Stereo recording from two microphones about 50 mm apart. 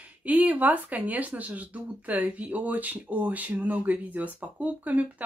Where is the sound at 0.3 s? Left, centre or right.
Right.